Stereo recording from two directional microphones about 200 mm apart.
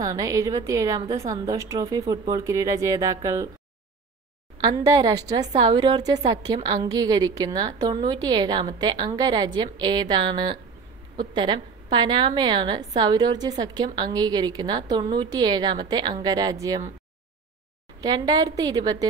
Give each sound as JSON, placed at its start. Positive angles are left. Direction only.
{"t": 0.0, "sound": "a woman's voice", "side_deg": -15}
{"t": 4.6, "sound": "a woman's voice", "side_deg": -20}
{"t": 18.0, "sound": "a woman's voice", "side_deg": -20}